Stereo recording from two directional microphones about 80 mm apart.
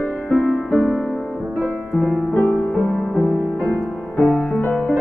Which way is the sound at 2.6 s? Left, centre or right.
Left.